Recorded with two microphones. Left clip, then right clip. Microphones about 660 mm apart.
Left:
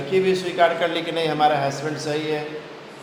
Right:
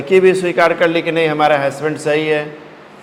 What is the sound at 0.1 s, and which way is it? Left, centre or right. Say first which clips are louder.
A man's voice: right 10 dB; right.